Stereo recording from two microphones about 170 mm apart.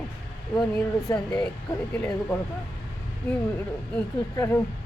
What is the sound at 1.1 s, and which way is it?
A woman's voice, 15° left (ahead or behind).